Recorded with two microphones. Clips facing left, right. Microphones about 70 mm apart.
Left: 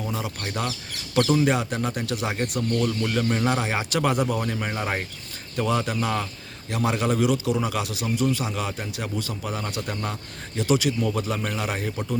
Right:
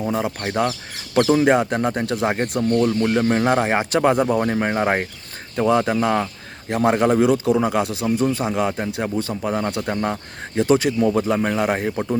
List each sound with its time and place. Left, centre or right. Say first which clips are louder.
0.1 s speech: right 8 dB; right
1.5 s speech: right 7 dB; right